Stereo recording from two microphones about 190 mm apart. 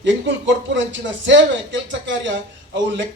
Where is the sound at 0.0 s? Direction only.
70° right (ahead or behind).